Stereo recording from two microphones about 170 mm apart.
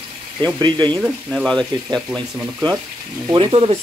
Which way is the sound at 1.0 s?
Centre (ahead or behind).